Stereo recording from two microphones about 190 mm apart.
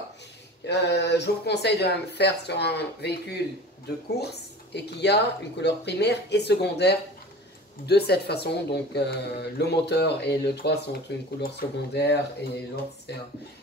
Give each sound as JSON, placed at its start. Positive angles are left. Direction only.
{"t": 0.7, "sound": "speech", "side_deg": 65}